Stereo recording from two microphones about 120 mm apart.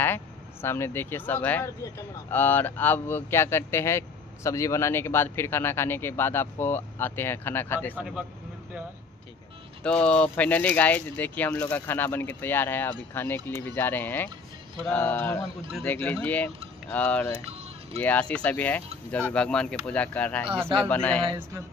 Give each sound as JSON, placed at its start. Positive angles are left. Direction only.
{"t": 0.0, "sound": "speech", "side_deg": 20}
{"t": 7.9, "sound": "speech", "side_deg": -10}
{"t": 9.8, "sound": "speech", "side_deg": 10}